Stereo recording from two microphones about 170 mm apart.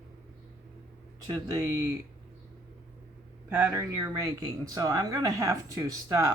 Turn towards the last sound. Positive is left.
turn(degrees=-20)  # may be behind; listen again after turning